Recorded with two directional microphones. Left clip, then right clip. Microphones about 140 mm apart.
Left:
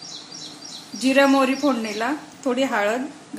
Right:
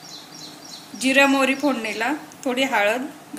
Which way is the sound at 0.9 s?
50° left (ahead or behind).